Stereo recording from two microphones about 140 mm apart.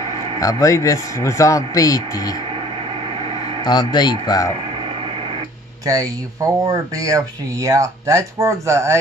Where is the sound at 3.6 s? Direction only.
30° left (ahead or behind).